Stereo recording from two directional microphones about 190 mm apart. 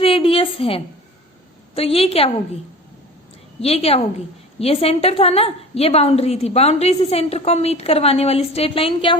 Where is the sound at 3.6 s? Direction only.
30° left (ahead or behind).